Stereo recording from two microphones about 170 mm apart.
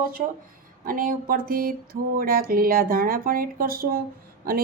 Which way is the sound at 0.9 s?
55° right (ahead or behind).